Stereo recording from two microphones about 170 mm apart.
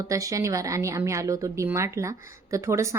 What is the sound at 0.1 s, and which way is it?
Speech, 20° right (ahead or behind).